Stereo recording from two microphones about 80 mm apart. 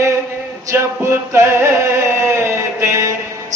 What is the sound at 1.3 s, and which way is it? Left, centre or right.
Music, right.